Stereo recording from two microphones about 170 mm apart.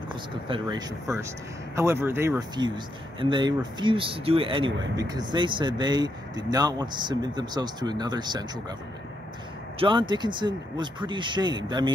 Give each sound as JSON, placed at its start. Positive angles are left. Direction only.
{"t": 0.1, "sound": "speech", "side_deg": -25}
{"t": 9.8, "sound": "speech", "side_deg": -30}